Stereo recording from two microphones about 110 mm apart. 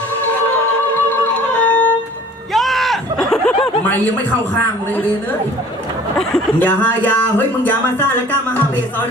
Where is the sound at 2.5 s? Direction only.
Centre (ahead or behind).